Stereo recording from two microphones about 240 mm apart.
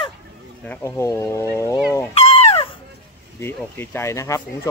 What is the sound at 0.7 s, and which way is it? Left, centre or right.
Speech, centre.